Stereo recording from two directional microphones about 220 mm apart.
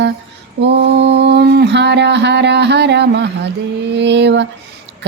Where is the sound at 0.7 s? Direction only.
50° right (ahead or behind).